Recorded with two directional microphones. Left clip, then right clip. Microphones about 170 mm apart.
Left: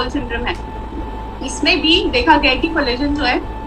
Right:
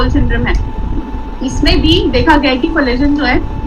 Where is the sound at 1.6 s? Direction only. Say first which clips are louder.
Right 2 dB; 40° left (ahead or behind).